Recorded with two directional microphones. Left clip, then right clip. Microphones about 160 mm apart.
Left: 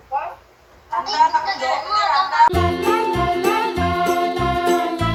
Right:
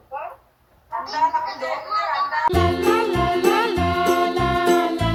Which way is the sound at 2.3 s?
Centre (ahead or behind).